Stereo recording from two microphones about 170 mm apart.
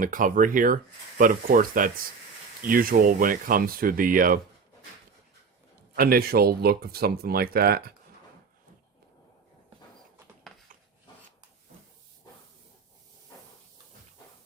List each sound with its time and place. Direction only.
0.0 s speech: 55° right (ahead or behind)
6.0 s speech: 60° right (ahead or behind)